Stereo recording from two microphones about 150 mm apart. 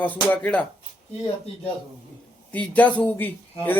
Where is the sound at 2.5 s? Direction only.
10° left (ahead or behind).